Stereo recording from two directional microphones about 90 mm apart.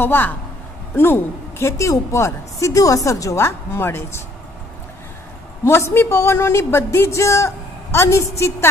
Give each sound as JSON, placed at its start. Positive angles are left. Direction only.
{"t": 0.0, "sound": "a woman's voice", "side_deg": 20}
{"t": 5.6, "sound": "a woman's voice", "side_deg": 30}